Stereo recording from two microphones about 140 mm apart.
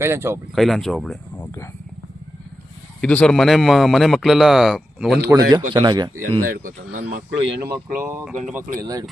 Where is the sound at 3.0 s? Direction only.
10° left (ahead or behind).